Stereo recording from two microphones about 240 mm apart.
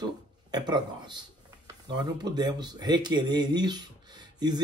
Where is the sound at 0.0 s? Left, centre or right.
Centre.